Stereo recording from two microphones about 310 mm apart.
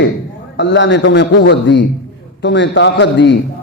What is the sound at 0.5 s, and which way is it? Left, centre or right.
A man's voice, left.